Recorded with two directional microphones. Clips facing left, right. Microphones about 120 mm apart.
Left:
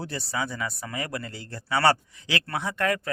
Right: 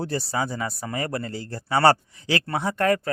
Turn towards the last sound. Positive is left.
turn(degrees=-35)  # may be behind; listen again after turning